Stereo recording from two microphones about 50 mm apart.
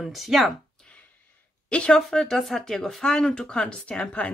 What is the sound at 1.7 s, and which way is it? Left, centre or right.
Speech, left.